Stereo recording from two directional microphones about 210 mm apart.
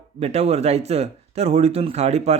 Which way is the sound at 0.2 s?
30° right (ahead or behind).